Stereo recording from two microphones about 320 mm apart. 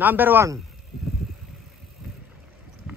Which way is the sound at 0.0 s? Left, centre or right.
Centre.